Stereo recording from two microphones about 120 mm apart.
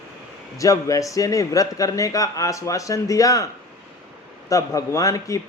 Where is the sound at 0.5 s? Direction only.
25° left (ahead or behind).